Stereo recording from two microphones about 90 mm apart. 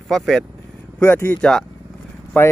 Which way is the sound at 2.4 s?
15° left (ahead or behind).